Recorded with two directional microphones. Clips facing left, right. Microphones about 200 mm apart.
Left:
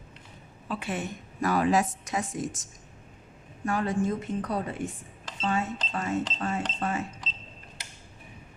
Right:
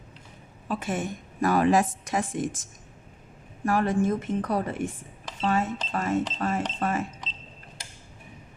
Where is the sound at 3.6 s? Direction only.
50° right (ahead or behind).